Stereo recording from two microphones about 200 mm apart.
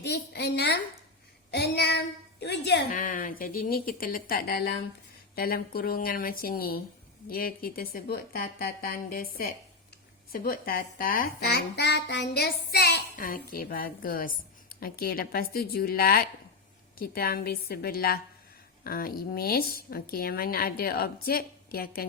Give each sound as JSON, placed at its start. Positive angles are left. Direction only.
{"t": 0.0, "sound": "a woman's voice", "side_deg": 55}
{"t": 2.9, "sound": "a woman's voice", "side_deg": 45}